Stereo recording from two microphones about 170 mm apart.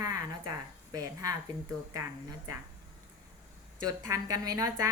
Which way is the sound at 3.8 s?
20° right (ahead or behind).